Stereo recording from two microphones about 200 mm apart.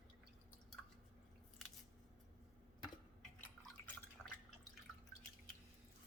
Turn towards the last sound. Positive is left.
turn(degrees=0)  # may be behind; listen again after turning